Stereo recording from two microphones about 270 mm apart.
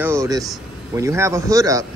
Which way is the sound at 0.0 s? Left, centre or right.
Centre.